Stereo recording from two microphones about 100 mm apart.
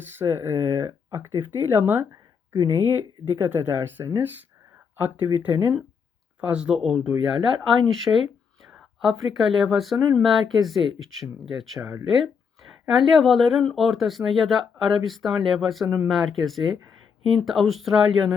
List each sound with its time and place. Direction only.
0.2 s speech: 25° right (ahead or behind); by 18.3 s 5° right (ahead or behind)